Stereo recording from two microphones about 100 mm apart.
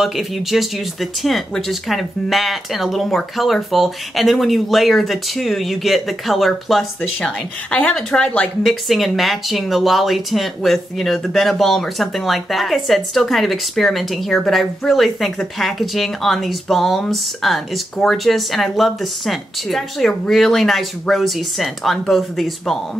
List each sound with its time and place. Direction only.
0.0 s speech: centre (ahead or behind)
7.7 s speech: 10° left (ahead or behind)
8.6 s speech: centre (ahead or behind)